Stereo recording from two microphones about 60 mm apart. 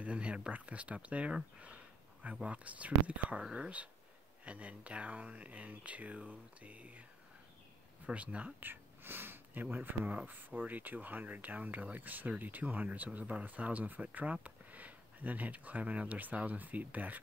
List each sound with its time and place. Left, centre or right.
0.0 s speech: right
8.1 s speech: right
8.5 s speech: right